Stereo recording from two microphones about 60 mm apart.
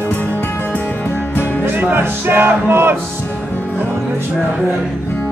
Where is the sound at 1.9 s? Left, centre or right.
Right.